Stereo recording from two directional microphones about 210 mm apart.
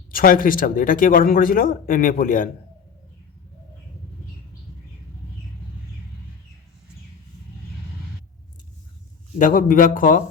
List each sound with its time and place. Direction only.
0.1 s speech: 40° left (ahead or behind)
9.4 s speech: 40° left (ahead or behind)